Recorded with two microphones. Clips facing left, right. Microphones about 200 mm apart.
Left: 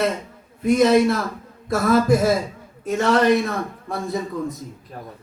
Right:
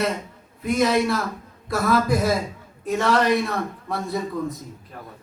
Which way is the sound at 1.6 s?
45° left (ahead or behind).